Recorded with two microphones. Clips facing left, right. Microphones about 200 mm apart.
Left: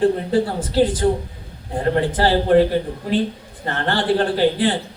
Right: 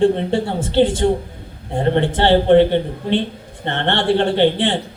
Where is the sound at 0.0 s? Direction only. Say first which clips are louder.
Right 1 dB; 25° right (ahead or behind).